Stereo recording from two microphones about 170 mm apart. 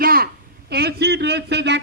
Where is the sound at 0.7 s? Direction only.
70° right (ahead or behind).